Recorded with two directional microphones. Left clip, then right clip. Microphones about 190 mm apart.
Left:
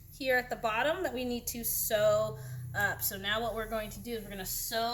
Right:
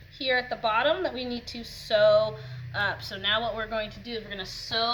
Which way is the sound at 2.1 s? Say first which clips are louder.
Right 7 dB; 10° left (ahead or behind).